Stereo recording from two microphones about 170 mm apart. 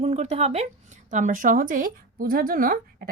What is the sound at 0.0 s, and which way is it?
A woman's voice, 40° right (ahead or behind).